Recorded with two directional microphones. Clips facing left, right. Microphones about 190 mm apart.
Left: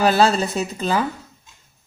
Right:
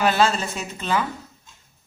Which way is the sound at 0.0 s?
35° left (ahead or behind).